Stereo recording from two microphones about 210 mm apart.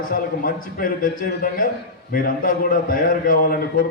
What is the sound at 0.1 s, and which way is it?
A man's voice, 40° left (ahead or behind).